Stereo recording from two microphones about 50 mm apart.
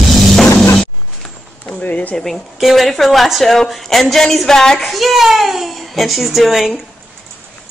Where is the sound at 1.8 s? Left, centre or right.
Left.